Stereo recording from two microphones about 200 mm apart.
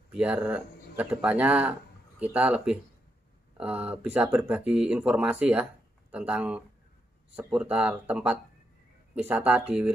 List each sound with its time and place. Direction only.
0.1 s speech: 5° right (ahead or behind)